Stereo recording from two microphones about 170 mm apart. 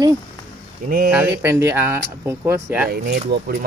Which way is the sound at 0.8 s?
55° right (ahead or behind).